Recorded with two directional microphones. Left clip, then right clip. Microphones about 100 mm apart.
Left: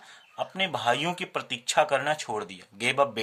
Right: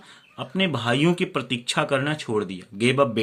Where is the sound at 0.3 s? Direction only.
20° left (ahead or behind).